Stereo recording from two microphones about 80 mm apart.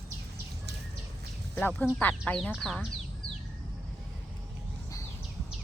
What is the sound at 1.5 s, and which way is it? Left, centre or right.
Speech, left.